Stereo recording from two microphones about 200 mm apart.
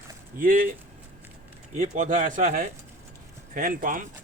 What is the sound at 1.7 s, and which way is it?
Speech, 40° right (ahead or behind).